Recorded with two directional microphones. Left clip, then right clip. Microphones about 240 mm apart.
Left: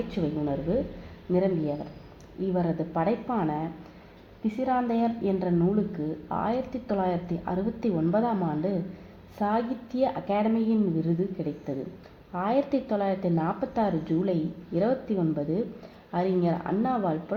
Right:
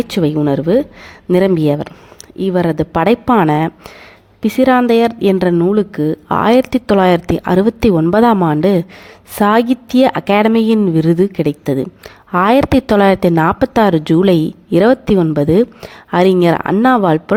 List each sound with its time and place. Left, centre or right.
0.2 s a woman's voice: right